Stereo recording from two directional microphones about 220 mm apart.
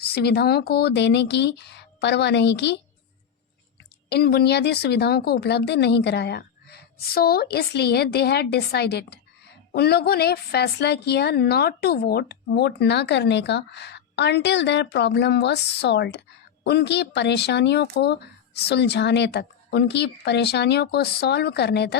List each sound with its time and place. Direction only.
0.0 s a woman's voice: 45° left (ahead or behind)
4.1 s a woman's voice: 45° left (ahead or behind)